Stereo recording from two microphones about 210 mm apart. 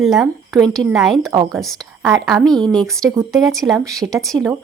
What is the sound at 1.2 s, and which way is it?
Speech, 20° right (ahead or behind).